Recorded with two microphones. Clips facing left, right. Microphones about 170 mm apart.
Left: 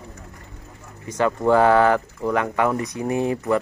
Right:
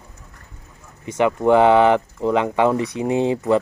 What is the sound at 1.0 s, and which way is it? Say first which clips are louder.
Speech: right 3 dB; 20° right (ahead or behind).